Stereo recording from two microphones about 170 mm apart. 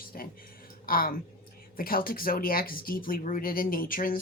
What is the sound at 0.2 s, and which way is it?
Speech, 55° left (ahead or behind).